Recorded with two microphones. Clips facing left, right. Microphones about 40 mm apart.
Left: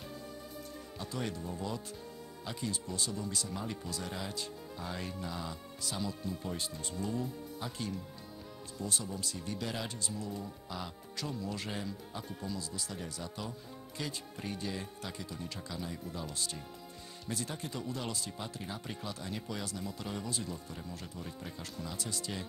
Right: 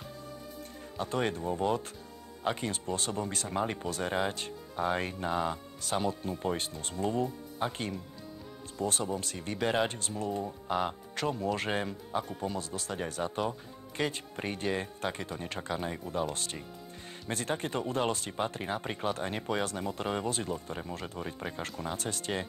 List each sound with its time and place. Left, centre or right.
0.9 s speech: right